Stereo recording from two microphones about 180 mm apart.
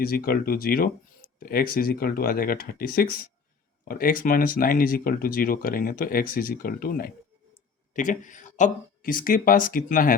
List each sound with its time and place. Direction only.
0.0 s speech: 55° left (ahead or behind)